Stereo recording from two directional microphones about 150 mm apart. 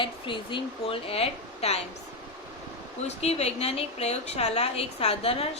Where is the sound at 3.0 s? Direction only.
45° left (ahead or behind).